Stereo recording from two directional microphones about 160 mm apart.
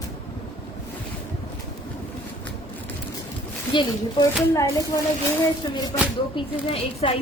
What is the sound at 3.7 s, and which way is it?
A woman's voice, 30° left (ahead or behind).